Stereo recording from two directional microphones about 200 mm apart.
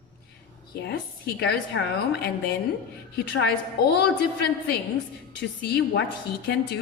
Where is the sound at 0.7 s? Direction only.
55° left (ahead or behind).